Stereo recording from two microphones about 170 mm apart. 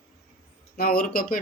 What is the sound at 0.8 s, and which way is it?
Speech, 60° left (ahead or behind).